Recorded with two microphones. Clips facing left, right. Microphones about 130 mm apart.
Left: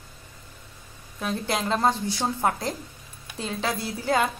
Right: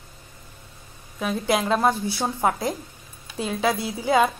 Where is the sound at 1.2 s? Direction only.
10° right (ahead or behind).